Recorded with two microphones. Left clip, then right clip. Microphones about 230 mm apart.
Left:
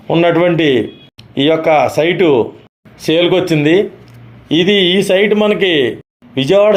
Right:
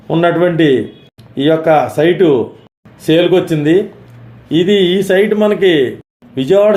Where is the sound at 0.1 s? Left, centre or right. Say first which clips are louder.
Left 1 dB; left.